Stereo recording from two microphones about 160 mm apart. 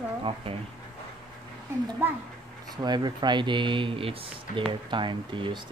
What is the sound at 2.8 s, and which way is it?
Speech, 25° right (ahead or behind).